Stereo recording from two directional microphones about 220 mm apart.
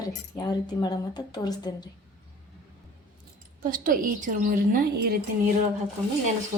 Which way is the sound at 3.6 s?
40° right (ahead or behind).